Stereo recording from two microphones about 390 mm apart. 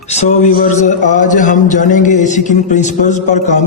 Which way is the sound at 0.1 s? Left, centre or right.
Centre.